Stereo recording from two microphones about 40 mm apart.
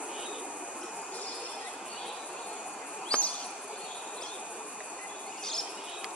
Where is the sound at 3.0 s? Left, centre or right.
Left.